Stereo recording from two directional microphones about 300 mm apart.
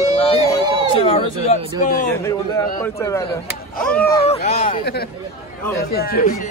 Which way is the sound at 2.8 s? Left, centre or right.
Centre.